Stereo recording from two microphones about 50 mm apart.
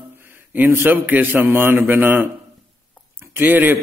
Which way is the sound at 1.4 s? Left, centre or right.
Right.